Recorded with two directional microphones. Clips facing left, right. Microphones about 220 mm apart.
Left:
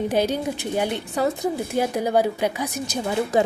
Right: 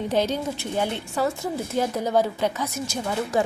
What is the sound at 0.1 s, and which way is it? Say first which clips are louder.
Speech: left 2 dB; 15° left (ahead or behind).